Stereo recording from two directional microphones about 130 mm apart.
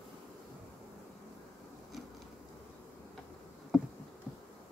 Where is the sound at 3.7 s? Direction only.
Centre (ahead or behind).